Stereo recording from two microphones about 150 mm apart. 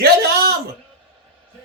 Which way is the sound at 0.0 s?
90° right.